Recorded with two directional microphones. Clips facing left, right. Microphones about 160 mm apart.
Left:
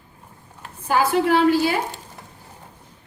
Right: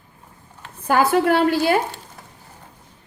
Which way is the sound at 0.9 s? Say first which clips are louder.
Right 2 dB; 55° right (ahead or behind).